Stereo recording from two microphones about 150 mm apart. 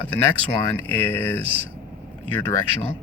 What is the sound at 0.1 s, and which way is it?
Speech, 10° left (ahead or behind).